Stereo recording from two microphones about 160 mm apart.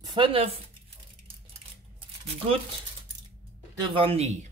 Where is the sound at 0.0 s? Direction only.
30° right (ahead or behind).